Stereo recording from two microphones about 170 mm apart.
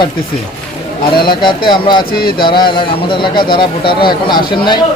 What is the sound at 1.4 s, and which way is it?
A man's voice, 30° left (ahead or behind).